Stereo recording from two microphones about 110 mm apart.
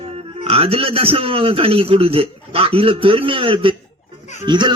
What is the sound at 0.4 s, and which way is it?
A man's voice, 60° right (ahead or behind).